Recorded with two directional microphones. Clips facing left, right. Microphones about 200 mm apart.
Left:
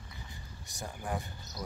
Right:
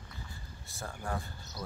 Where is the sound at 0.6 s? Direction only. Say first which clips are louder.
Even; 15° left (ahead or behind).